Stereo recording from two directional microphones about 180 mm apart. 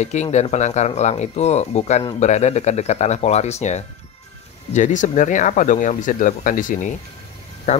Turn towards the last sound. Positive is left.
turn(degrees=40)  # may be behind; listen again after turning